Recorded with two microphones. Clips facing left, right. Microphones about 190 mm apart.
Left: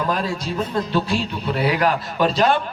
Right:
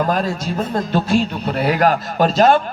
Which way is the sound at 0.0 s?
45° right (ahead or behind).